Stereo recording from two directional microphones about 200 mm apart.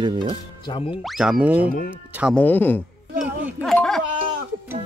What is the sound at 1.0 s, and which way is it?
Speech, centre (ahead or behind).